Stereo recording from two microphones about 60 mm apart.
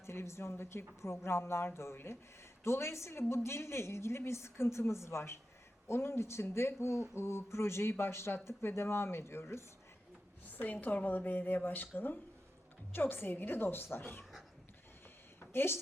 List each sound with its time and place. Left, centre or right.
0.0 s speech: left
10.6 s a woman's voice: left
15.5 s a woman's voice: left